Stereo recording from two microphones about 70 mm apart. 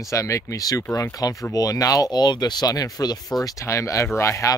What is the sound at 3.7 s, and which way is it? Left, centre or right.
Speech, left.